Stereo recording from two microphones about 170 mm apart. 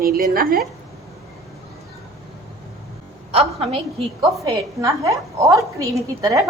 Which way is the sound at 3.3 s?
35° right (ahead or behind).